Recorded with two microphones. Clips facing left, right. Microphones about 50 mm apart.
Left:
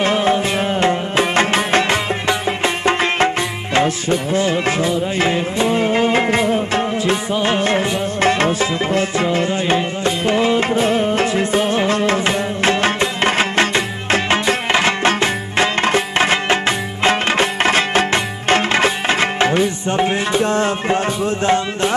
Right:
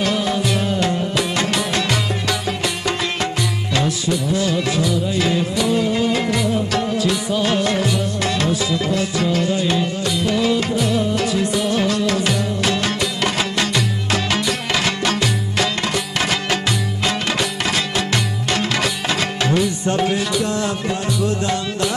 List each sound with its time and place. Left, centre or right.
0.0 s music: left